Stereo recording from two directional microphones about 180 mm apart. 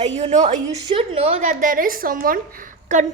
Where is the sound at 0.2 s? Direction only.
40° right (ahead or behind).